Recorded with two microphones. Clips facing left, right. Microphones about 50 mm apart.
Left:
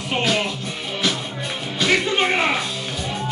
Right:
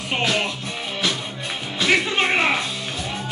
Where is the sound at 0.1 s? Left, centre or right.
Centre.